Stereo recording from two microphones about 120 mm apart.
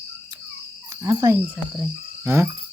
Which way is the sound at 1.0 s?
25° right (ahead or behind).